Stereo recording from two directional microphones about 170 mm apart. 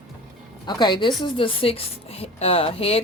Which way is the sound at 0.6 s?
25° left (ahead or behind).